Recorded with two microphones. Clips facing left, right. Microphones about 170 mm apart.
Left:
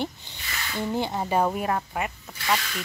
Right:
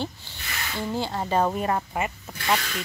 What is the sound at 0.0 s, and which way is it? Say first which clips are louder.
Snake: left 1 dB; 20° left (ahead or behind).